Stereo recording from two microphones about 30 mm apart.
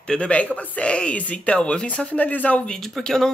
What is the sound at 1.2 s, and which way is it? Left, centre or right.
Speech, left.